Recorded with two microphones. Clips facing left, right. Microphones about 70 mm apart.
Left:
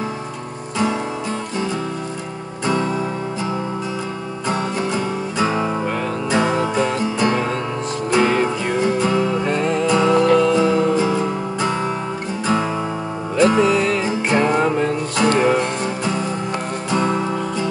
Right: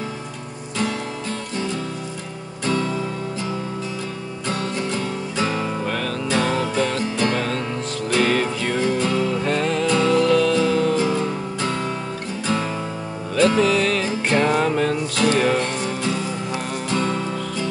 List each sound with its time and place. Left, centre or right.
2.6 s music: left
4.5 s music: left
13.4 s music: centre
16.9 s music: centre